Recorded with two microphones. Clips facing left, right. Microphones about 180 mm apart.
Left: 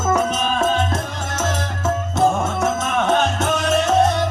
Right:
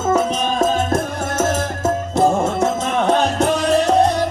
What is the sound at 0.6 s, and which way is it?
Music, 40° right (ahead or behind).